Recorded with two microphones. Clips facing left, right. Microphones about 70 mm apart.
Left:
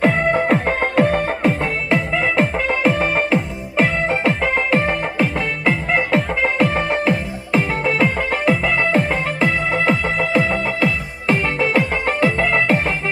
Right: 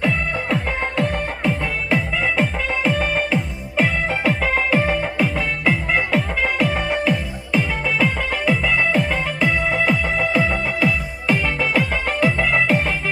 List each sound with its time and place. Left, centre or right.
0.0 s music: left
1.9 s music: left
6.6 s music: left
10.2 s music: centre
11.3 s music: left